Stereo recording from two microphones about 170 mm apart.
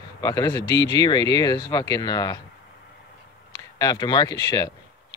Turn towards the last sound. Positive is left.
turn(degrees=25)  # may be behind; listen again after turning